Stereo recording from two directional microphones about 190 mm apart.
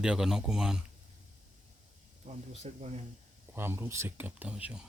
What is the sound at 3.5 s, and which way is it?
Speech, 10° right (ahead or behind).